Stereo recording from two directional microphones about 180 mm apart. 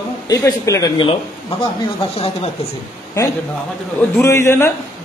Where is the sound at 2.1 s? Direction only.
35° left (ahead or behind).